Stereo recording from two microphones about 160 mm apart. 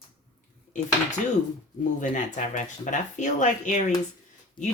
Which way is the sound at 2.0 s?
55° left (ahead or behind).